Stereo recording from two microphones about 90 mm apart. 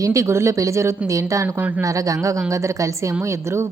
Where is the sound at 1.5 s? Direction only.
15° right (ahead or behind).